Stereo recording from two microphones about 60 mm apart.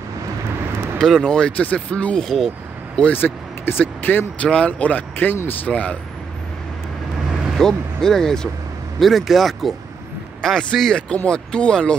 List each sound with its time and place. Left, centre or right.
0.9 s speech: centre
2.2 s speech: centre
3.1 s speech: left
4.5 s speech: centre
7.5 s speech: centre
11.0 s speech: centre